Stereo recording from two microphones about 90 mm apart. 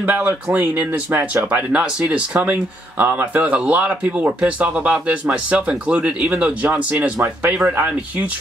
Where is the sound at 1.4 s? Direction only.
15° right (ahead or behind).